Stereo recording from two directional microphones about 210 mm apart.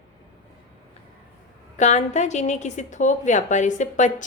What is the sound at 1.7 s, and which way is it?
A woman's voice, 35° left (ahead or behind).